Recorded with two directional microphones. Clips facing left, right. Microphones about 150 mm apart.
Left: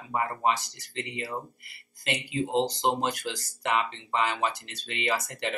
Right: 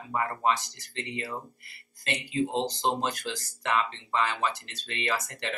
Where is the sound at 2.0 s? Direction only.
15° left (ahead or behind).